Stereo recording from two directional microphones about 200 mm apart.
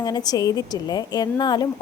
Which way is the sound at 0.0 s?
20° left (ahead or behind).